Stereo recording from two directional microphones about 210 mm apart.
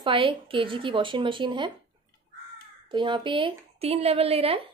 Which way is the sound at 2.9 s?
20° right (ahead or behind).